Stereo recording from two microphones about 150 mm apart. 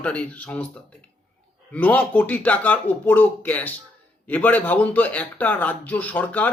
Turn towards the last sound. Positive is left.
turn(degrees=10)  # may be behind; listen again after turning